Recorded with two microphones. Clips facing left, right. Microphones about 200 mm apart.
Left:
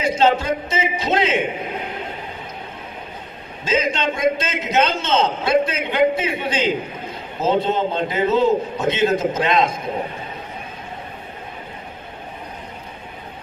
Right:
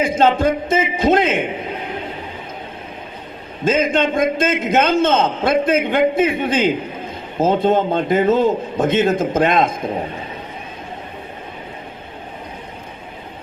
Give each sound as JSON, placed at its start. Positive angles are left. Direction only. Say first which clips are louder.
{"t": 0.0, "sound": "a man's voice", "louder": "right 3 dB", "side_deg": -50}
{"t": 3.6, "sound": "a man's voice", "louder": "right 5 dB", "side_deg": -50}